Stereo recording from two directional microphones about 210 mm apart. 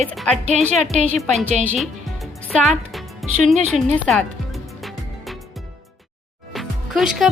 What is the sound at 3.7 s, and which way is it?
Music, 5° left (ahead or behind).